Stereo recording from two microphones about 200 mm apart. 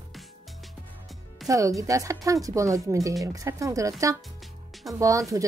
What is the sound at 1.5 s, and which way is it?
Speech, 15° right (ahead or behind).